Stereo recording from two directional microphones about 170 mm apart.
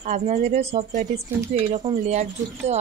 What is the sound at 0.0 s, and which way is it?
Speech, 45° right (ahead or behind).